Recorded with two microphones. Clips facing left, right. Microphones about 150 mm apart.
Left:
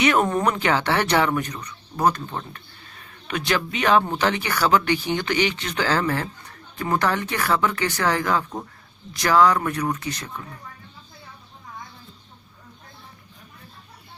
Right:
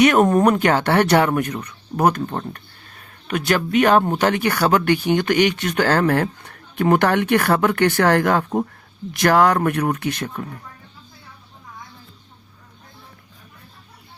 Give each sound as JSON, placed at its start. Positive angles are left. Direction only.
{"t": 0.0, "sound": "speech", "side_deg": -50}